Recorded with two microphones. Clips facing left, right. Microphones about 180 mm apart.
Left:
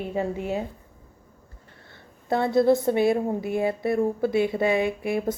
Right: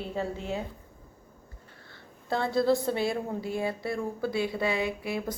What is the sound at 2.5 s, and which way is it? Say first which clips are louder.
Speech: left 6 dB; 20° left (ahead or behind).